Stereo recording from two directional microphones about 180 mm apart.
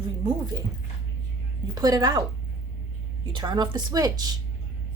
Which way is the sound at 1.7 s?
20° right (ahead or behind).